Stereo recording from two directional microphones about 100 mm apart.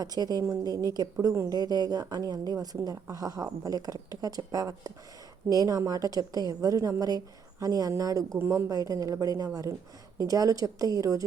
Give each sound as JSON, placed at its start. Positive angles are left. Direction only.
{"t": 0.0, "sound": "a woman's voice", "side_deg": -40}
{"t": 8.4, "sound": "speech", "side_deg": -25}
{"t": 8.7, "sound": "a woman's voice", "side_deg": -35}